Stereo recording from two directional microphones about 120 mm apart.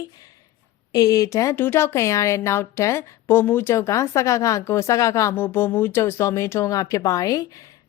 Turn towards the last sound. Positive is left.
turn(degrees=30)  # may be behind; listen again after turning